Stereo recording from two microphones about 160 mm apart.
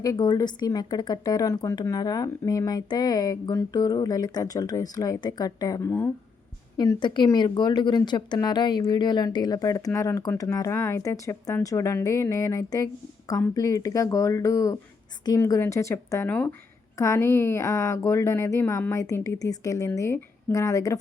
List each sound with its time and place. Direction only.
0.0 s speech: 25° left (ahead or behind)
6.7 s a woman's voice: 30° left (ahead or behind)